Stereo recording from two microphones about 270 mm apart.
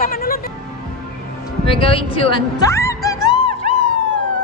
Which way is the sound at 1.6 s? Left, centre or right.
Centre.